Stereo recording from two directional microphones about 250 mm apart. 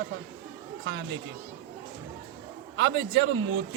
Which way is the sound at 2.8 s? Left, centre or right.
Right.